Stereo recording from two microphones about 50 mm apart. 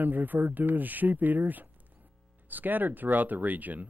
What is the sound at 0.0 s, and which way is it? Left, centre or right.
Speech, right.